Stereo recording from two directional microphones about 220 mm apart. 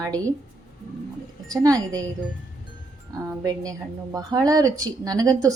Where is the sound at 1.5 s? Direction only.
15° right (ahead or behind).